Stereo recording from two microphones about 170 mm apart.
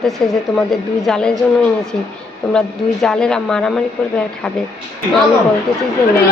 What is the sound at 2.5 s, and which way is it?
A woman's voice, 5° left (ahead or behind).